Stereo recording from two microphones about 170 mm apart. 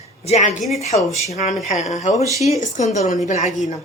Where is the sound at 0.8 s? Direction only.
40° left (ahead or behind).